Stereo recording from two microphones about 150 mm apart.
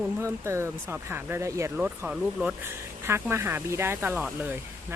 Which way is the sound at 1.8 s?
5° right (ahead or behind).